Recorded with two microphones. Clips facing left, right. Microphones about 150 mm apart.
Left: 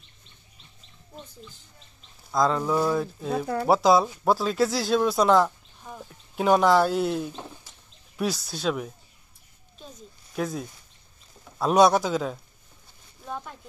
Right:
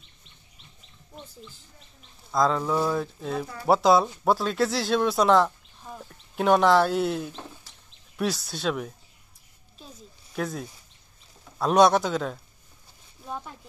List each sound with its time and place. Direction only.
2.3 s speech: centre (ahead or behind)
3.4 s speech: 75° left (ahead or behind)
3.7 s speech: centre (ahead or behind)
10.3 s speech: centre (ahead or behind)